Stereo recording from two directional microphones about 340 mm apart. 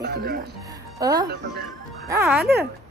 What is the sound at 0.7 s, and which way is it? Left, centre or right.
Music, centre.